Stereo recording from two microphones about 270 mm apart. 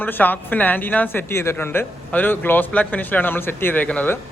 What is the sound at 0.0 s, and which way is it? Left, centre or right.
Speech, centre.